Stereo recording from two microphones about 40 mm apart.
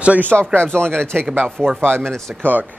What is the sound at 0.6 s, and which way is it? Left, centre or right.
Speech, left.